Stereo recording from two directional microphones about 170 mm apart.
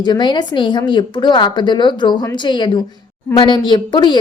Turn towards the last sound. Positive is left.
turn(degrees=25)  # may be behind; listen again after turning